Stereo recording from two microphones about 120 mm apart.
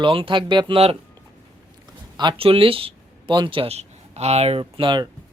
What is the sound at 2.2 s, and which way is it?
Speech, 45° right (ahead or behind).